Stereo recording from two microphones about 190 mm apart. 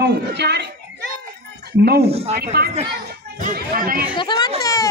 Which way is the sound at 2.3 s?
55° right (ahead or behind).